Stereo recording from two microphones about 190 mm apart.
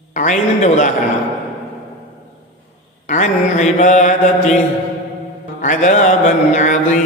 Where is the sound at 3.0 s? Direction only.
40° left (ahead or behind).